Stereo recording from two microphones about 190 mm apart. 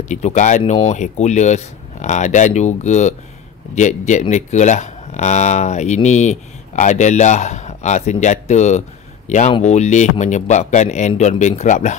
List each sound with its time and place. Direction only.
0.1 s speech: 40° left (ahead or behind)